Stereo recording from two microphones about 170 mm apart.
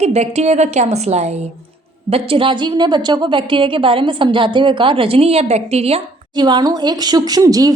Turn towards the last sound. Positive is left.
turn(degrees=-20)  # may be behind; listen again after turning